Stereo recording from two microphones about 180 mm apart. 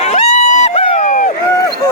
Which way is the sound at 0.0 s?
40° left (ahead or behind).